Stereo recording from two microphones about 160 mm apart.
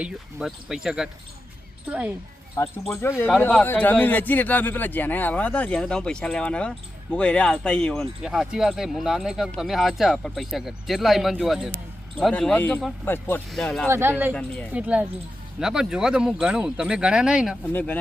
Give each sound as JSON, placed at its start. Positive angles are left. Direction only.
{"t": 0.0, "sound": "speech", "side_deg": -5}
{"t": 2.6, "sound": "a man's voice", "side_deg": 20}
{"t": 13.8, "sound": "speech", "side_deg": -15}
{"t": 17.7, "sound": "a man's voice", "side_deg": 10}